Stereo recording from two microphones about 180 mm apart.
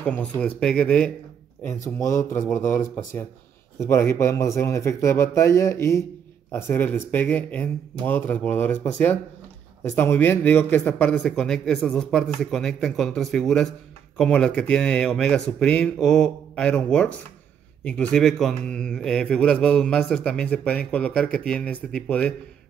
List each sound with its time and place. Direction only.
0.0 s speech: 10° left (ahead or behind)
2.0 s speech: 20° left (ahead or behind)
3.8 s speech: 15° left (ahead or behind)